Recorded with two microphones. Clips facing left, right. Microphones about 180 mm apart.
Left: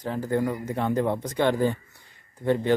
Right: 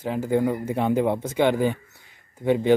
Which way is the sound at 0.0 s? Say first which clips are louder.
Right 3 dB; 10° right (ahead or behind).